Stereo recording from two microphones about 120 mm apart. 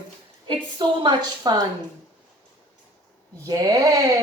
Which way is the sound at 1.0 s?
35° right (ahead or behind).